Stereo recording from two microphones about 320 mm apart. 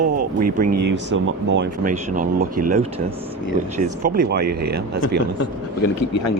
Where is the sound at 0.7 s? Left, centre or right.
Right.